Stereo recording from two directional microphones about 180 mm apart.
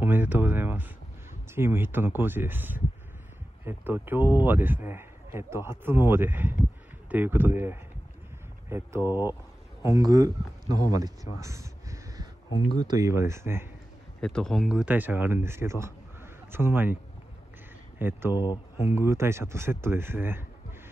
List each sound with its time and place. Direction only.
0.0 s speech: 10° right (ahead or behind)
9.0 s speech: 20° left (ahead or behind)
9.8 s speech: 20° right (ahead or behind)
11.4 s a sound: 15° right (ahead or behind)
12.8 s speech: 20° right (ahead or behind)
14.2 s speech: 5° left (ahead or behind); by 16.9 s 10° right (ahead or behind)
17.9 s speech: 10° right (ahead or behind)
18.3 s speech: 25° left (ahead or behind)
18.9 s speech: 15° right (ahead or behind)